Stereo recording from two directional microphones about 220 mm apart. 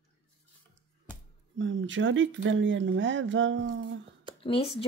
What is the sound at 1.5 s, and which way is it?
Speech, 55° right (ahead or behind).